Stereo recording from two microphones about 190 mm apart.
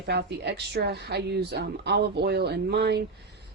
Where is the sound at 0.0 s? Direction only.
60° right (ahead or behind).